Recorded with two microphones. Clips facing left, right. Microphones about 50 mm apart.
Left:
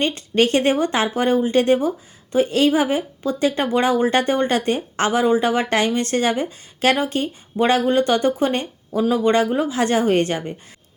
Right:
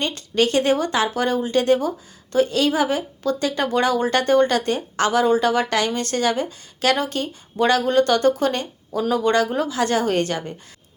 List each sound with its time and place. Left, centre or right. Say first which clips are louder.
0.0 s speech: left 2 dB; left